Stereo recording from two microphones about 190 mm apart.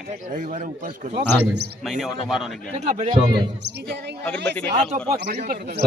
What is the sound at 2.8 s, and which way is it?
Speech, 35° right (ahead or behind).